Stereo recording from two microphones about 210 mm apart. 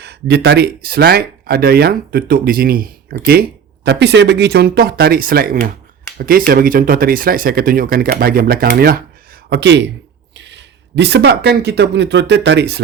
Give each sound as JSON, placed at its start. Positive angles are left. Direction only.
{"t": 0.0, "sound": "speech", "side_deg": -50}
{"t": 9.5, "sound": "speech", "side_deg": -55}